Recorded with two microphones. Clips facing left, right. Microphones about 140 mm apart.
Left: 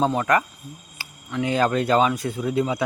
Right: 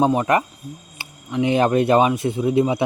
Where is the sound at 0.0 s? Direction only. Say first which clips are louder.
Right 3 dB; 20° right (ahead or behind).